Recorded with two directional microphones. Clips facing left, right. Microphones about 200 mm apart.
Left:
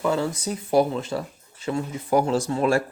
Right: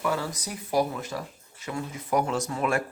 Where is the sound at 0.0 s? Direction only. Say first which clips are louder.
Left 5 dB; 25° left (ahead or behind).